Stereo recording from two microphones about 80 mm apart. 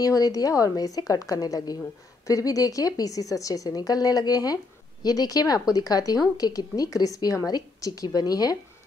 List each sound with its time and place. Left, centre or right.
0.0 s a woman's voice: left